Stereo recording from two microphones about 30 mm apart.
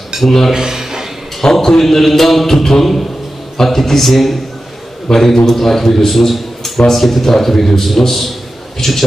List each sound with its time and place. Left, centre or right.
0.2 s a man's voice: centre
0.5 s speech: centre
1.4 s a man's voice: centre
5.1 s a man's voice: centre